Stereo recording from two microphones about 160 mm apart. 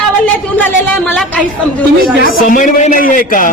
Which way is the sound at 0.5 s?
10° left (ahead or behind).